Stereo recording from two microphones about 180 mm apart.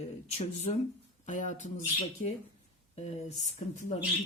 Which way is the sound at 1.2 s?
45° left (ahead or behind).